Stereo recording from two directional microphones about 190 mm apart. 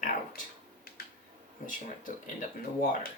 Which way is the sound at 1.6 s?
45° left (ahead or behind).